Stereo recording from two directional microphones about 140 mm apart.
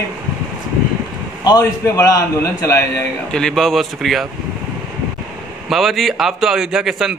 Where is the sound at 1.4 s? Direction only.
25° left (ahead or behind).